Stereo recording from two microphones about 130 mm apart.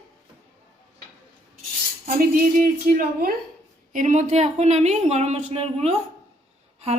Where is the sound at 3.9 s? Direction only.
80° right.